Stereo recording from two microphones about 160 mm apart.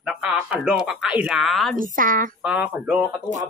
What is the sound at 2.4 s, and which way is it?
Speech, 5° right (ahead or behind).